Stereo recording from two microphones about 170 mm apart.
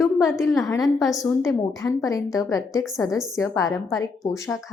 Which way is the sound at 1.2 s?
20° left (ahead or behind).